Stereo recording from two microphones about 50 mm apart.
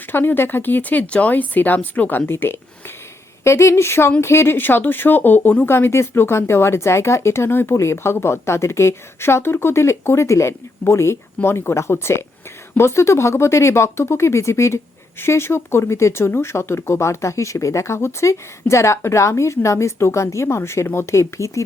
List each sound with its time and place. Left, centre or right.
0.1 s speech: left
3.4 s a woman's voice: left
4.5 s speech: left
5.6 s a woman's voice: left
15.2 s speech: left
21.1 s speech: left